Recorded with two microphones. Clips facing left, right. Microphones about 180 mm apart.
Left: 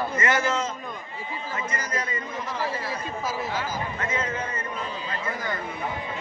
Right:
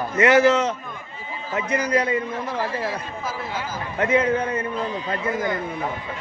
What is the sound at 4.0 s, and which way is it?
Speech, 65° right (ahead or behind).